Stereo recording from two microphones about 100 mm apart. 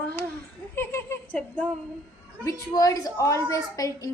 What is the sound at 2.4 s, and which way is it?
A woman's voice, 35° left (ahead or behind).